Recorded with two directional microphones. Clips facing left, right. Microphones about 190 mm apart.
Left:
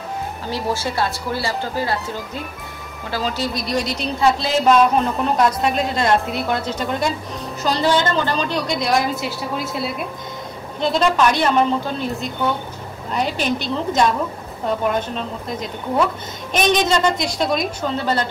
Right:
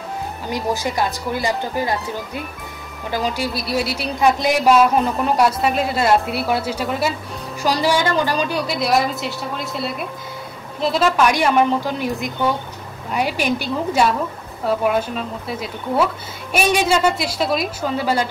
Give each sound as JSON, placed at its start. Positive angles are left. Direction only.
{"t": 0.5, "sound": "speech", "side_deg": -15}
{"t": 3.5, "sound": "a woman's voice", "side_deg": -5}